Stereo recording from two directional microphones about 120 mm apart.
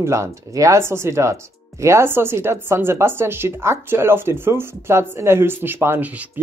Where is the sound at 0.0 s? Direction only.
25° right (ahead or behind).